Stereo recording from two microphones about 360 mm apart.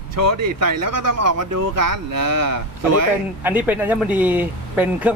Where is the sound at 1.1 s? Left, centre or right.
Right.